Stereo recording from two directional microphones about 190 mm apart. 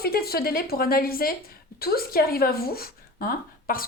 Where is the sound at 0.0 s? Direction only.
55° left (ahead or behind).